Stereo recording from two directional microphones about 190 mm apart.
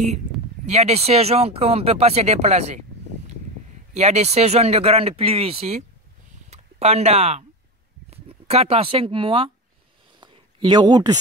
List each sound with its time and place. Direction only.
0.7 s speech: 35° right (ahead or behind)
3.9 s speech: 35° right (ahead or behind)
10.2 s a sound: 25° right (ahead or behind)